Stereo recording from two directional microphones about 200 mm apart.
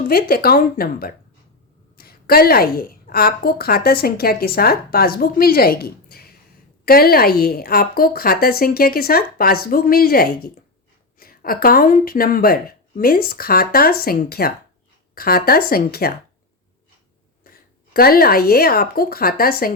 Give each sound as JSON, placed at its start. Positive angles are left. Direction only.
{"t": 0.1, "sound": "a woman's voice", "side_deg": 50}
{"t": 17.9, "sound": "a woman's voice", "side_deg": 50}